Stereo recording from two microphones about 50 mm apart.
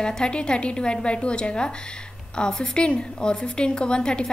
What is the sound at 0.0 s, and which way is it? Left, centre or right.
A woman's voice, centre.